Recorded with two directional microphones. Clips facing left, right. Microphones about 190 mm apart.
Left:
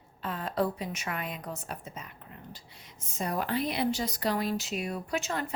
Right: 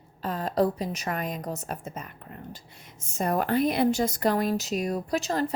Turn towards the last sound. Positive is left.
turn(degrees=-35)  # may be behind; listen again after turning